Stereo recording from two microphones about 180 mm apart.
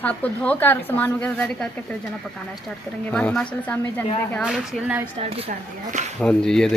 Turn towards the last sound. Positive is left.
turn(degrees=5)  # may be behind; listen again after turning